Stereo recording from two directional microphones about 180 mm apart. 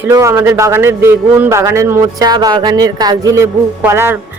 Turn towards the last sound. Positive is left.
turn(degrees=-15)  # may be behind; listen again after turning